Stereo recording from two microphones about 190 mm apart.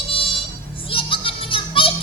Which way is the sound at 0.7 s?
30° left (ahead or behind).